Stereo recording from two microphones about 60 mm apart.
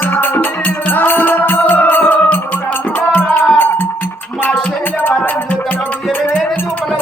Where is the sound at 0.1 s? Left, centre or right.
Left.